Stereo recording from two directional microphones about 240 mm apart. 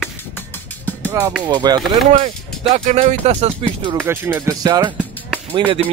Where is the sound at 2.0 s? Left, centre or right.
Right.